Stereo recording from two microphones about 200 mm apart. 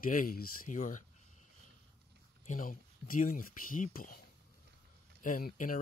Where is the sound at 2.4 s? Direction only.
40° left (ahead or behind).